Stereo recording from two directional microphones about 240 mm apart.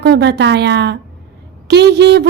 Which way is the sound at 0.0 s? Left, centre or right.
Right.